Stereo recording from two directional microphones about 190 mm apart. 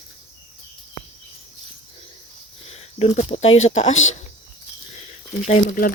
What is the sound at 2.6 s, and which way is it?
Speech, 35° left (ahead or behind).